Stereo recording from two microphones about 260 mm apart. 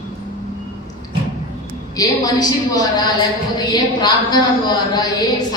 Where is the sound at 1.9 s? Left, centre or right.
Centre.